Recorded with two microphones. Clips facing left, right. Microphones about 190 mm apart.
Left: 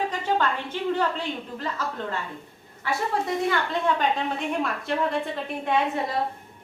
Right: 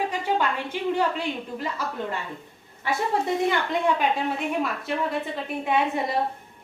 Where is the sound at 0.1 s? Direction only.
10° right (ahead or behind).